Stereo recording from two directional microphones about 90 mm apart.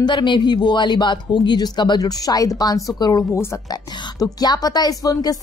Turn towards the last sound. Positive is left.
turn(degrees=45)  # may be behind; listen again after turning